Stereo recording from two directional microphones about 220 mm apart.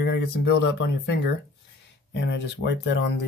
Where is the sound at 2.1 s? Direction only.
55° left (ahead or behind).